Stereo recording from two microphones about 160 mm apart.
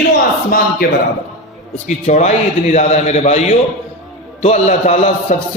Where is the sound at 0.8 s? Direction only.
65° left (ahead or behind).